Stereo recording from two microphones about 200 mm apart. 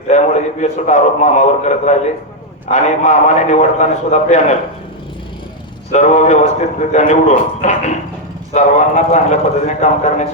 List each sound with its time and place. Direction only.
0.1 s a man's voice: 35° left (ahead or behind)
5.9 s a man's voice: 35° left (ahead or behind)